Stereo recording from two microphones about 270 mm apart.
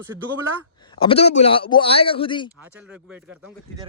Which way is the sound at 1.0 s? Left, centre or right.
Left.